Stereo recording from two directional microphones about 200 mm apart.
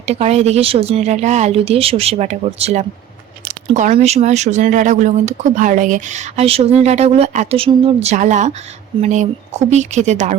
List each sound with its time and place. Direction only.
0.0 s speech: 30° right (ahead or behind)